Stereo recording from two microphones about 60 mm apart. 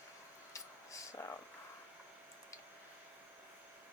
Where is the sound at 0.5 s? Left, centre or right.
Left.